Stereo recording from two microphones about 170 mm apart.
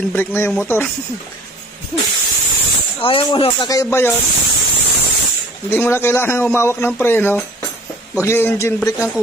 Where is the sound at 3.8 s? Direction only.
15° left (ahead or behind).